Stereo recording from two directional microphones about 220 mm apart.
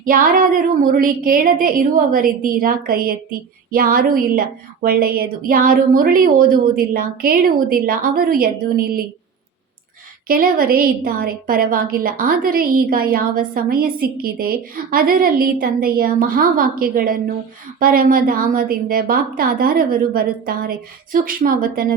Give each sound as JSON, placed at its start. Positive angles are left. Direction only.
{"t": 0.0, "sound": "a woman's voice", "side_deg": -40}
{"t": 10.2, "sound": "a woman's voice", "side_deg": -40}